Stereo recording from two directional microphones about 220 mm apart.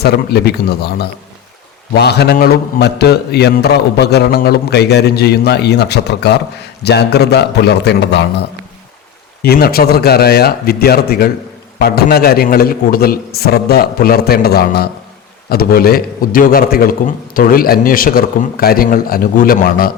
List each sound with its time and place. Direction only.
0.0 s a man's voice: 50° left (ahead or behind)